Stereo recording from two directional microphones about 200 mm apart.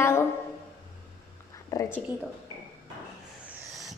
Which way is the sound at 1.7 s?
15° left (ahead or behind).